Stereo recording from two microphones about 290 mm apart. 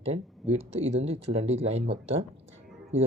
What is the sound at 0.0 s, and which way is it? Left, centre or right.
Speech, right.